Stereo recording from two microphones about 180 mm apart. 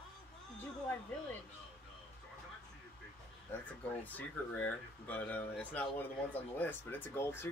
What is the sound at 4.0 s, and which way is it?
Speech, 10° left (ahead or behind).